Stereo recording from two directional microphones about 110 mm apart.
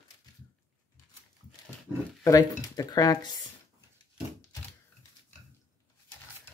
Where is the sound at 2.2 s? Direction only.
35° left (ahead or behind).